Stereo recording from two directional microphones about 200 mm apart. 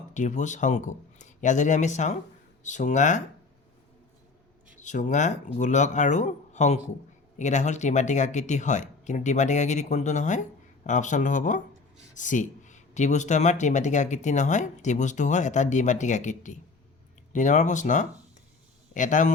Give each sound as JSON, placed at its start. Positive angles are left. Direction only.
{"t": 0.1, "sound": "speech", "side_deg": 35}
{"t": 4.8, "sound": "speech", "side_deg": 40}